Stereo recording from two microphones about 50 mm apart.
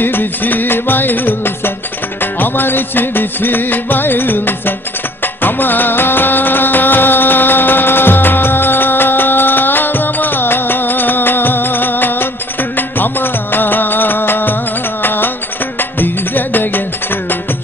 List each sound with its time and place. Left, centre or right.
0.0 s music: left